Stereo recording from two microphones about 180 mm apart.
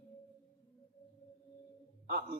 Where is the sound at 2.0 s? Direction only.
55° right (ahead or behind).